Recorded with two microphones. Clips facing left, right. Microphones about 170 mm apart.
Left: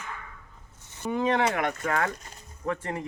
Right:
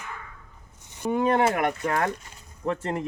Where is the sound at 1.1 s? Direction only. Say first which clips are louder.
Right 3 dB; 45° right (ahead or behind).